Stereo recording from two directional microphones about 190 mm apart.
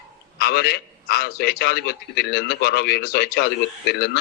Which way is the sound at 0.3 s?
55° left (ahead or behind).